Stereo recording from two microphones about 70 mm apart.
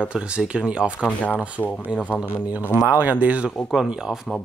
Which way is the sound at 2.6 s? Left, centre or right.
Left.